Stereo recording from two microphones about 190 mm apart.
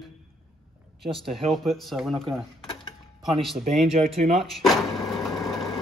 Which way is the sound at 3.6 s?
40° right (ahead or behind).